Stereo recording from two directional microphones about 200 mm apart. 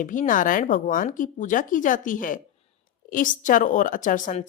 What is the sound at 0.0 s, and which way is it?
A woman's voice, 40° left (ahead or behind).